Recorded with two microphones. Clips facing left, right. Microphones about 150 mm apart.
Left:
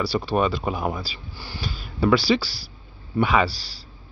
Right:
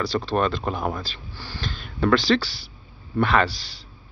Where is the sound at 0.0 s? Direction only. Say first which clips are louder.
Left 1 dB; 10° left (ahead or behind).